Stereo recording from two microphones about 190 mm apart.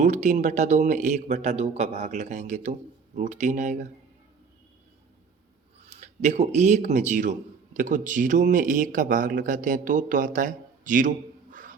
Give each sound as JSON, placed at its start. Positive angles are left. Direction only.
{"t": 0.0, "sound": "a man's voice", "side_deg": -35}
{"t": 5.9, "sound": "a man's voice", "side_deg": -35}